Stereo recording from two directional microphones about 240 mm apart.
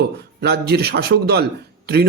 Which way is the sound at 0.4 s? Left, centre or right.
Right.